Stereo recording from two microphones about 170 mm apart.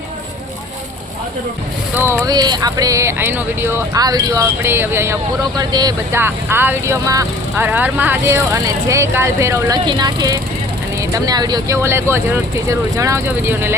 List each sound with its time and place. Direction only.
2.0 s speech: 15° right (ahead or behind)